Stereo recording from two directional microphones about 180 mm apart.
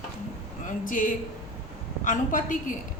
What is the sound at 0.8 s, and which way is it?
A woman's voice, 50° left (ahead or behind).